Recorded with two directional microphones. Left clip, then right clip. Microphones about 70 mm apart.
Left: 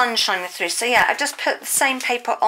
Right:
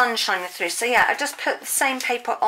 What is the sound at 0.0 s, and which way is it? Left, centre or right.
Speech, left.